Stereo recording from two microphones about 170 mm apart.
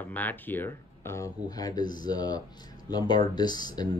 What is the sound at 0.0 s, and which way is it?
Speech, 10° left (ahead or behind).